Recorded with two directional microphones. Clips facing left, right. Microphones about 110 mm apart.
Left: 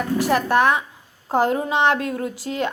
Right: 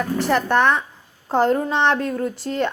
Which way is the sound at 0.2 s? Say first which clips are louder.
Even; 5° left (ahead or behind).